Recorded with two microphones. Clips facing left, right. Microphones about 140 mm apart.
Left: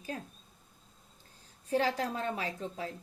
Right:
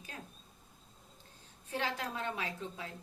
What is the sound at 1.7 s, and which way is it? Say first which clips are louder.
A woman's voice: left 7 dB; 35° left (ahead or behind).